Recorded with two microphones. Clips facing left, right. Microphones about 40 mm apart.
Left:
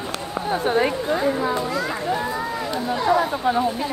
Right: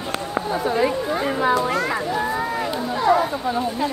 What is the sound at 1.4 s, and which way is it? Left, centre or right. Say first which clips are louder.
Speech: right 4 dB; right.